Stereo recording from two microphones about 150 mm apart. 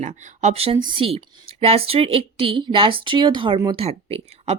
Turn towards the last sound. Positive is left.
turn(degrees=-40)  # may be behind; listen again after turning